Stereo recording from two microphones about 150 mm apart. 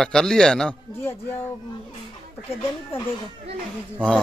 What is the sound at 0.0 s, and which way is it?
Speech, 5° left (ahead or behind).